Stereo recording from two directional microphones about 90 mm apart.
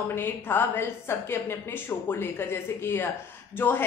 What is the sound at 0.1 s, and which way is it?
A woman's voice, 25° left (ahead or behind).